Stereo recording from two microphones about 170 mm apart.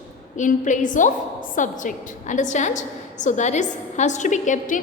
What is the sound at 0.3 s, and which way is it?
A woman's voice, 45° left (ahead or behind).